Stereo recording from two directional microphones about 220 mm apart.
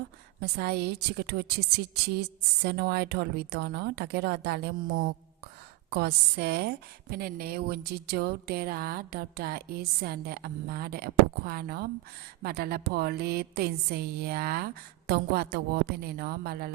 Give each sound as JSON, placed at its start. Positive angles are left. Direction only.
{"t": 0.3, "sound": "a woman's voice", "side_deg": -45}